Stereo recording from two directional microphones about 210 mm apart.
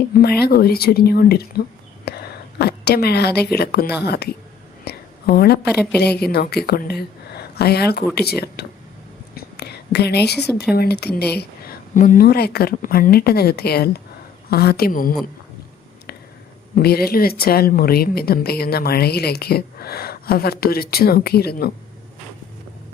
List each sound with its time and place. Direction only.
0.2 s a woman's voice: 50° left (ahead or behind)
5.7 s a woman's voice: 5° left (ahead or behind)
6.1 s speech: 50° left (ahead or behind)
9.3 s whispering: 50° left (ahead or behind)
10.8 s speech: 50° left (ahead or behind)
11.9 s speech: 40° left (ahead or behind)
16.7 s speech: 45° left (ahead or behind)